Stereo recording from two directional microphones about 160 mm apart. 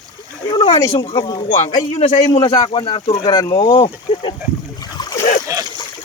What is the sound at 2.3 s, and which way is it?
Speech, 30° left (ahead or behind).